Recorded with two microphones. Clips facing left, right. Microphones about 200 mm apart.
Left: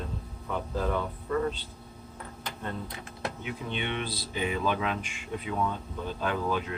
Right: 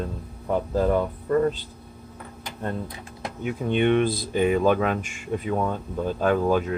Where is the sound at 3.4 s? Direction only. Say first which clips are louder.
Right 15 dB; 50° right (ahead or behind).